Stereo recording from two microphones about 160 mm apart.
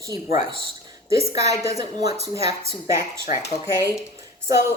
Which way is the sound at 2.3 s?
20° right (ahead or behind).